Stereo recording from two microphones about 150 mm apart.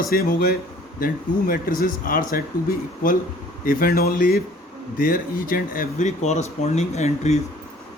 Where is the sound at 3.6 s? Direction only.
70° left (ahead or behind).